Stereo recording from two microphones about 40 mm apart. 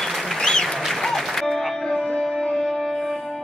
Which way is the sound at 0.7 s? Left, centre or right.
Centre.